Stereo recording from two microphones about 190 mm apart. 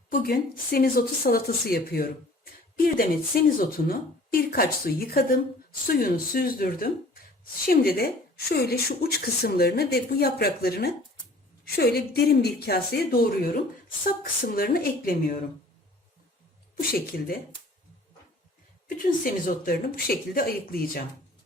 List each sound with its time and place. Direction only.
0.1 s a woman's voice: 50° left (ahead or behind)
16.9 s speech: 50° left (ahead or behind)
18.9 s speech: 50° left (ahead or behind)